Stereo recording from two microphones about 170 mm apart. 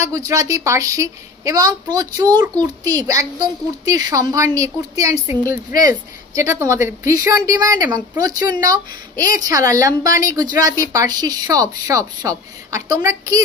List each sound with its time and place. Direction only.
0.3 s a woman's voice: 20° right (ahead or behind)